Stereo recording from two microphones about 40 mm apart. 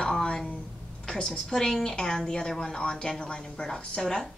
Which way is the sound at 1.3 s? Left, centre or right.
Centre.